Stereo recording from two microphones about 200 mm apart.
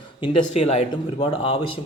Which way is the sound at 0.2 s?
30° left (ahead or behind).